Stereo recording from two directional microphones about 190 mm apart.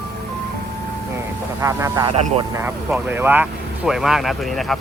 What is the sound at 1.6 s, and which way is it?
Speech, 20° right (ahead or behind).